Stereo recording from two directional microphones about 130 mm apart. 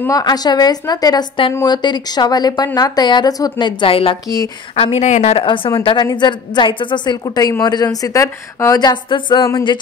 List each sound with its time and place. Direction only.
0.0 s a woman's voice: 30° left (ahead or behind); by 5.4 s 60° left (ahead or behind)
5.4 s a woman's voice: 40° left (ahead or behind)